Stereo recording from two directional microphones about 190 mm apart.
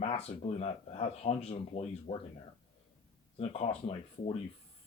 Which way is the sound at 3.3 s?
30° left (ahead or behind).